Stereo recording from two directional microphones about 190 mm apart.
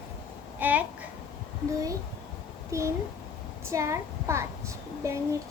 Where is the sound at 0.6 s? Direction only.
10° right (ahead or behind).